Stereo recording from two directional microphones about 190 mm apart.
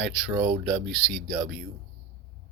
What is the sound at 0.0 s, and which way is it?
Speech, 5° right (ahead or behind).